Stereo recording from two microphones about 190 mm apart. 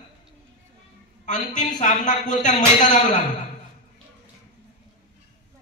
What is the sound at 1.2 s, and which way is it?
A man's voice, 40° left (ahead or behind).